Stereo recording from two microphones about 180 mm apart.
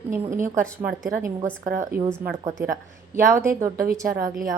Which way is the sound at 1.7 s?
55° right (ahead or behind).